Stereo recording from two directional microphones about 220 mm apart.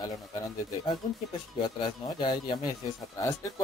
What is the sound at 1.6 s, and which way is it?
Speech, 20° left (ahead or behind).